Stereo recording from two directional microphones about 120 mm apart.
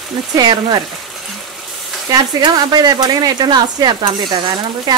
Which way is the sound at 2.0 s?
30° right (ahead or behind).